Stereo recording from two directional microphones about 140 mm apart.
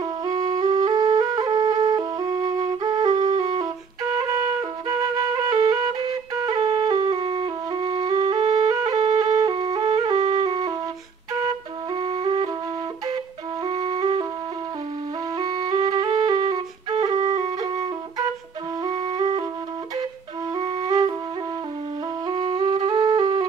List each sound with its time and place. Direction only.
0.0 s music: 30° right (ahead or behind)
0.7 s flute: 30° right (ahead or behind)
3.3 s wind instrument: 40° right (ahead or behind)
4.3 s flute: 25° right (ahead or behind)
5.5 s music: 30° right (ahead or behind)
11.9 s flute: 35° right (ahead or behind)
13.7 s flute: 35° right (ahead or behind)
15.3 s flute: 30° right (ahead or behind)
17.6 s music: 30° right (ahead or behind)
18.9 s music: 30° right (ahead or behind)
20.5 s music: 35° right (ahead or behind)
22.3 s music: 30° right (ahead or behind)